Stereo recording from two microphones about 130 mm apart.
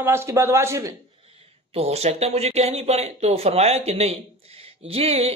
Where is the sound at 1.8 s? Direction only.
55° right (ahead or behind).